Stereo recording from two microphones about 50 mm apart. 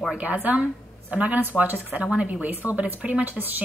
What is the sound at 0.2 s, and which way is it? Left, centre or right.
A woman's voice, right.